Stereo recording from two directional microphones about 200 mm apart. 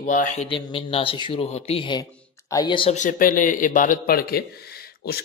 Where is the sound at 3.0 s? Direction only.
40° left (ahead or behind).